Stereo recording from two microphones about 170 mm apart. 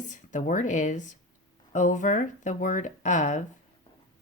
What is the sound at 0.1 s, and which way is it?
Speech, 50° left (ahead or behind).